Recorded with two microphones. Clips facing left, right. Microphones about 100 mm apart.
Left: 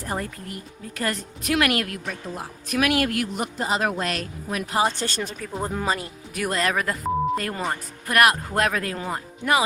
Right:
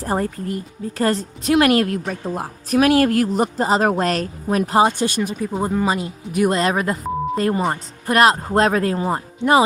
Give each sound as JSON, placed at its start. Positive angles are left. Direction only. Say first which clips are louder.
{"t": 0.0, "sound": "a woman's voice", "louder": "right 8 dB", "side_deg": -35}
{"t": 2.7, "sound": "a woman's voice", "louder": "right 8 dB", "side_deg": -35}
{"t": 4.9, "sound": "speech", "louder": "right 7 dB", "side_deg": -15}
{"t": 5.9, "sound": "speech", "louder": "right 5 dB", "side_deg": -20}